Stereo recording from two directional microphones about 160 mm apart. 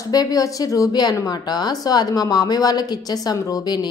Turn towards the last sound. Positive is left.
turn(degrees=25)  # may be behind; listen again after turning